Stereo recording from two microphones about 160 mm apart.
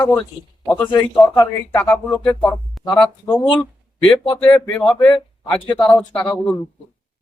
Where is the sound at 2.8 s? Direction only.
25° left (ahead or behind).